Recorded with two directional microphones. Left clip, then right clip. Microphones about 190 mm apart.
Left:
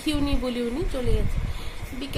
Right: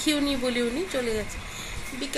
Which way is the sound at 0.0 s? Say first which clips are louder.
Right 2 dB; 15° left (ahead or behind).